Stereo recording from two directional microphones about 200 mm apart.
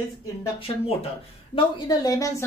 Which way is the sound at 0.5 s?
25° left (ahead or behind).